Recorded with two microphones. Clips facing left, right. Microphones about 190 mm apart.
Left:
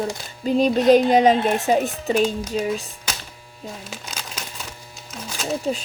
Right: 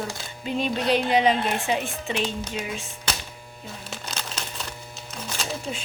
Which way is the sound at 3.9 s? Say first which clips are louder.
Even; 10° left (ahead or behind).